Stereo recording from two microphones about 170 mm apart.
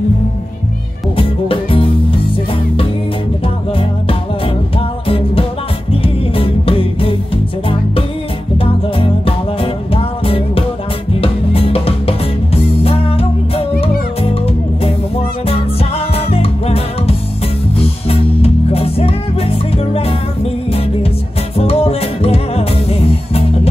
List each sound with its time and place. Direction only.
1.1 s music: 30° left (ahead or behind)
4.7 s music: 35° left (ahead or behind)
8.5 s music: 35° left (ahead or behind)
15.4 s music: 35° left (ahead or behind)
21.5 s music: 35° left (ahead or behind)